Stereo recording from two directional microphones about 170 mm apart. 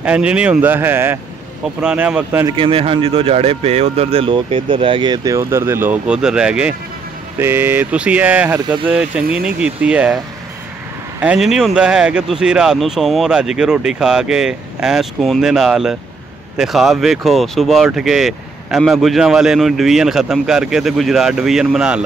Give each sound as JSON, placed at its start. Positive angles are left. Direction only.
{"t": 0.0, "sound": "speech", "side_deg": -5}
{"t": 2.4, "sound": "speech", "side_deg": -30}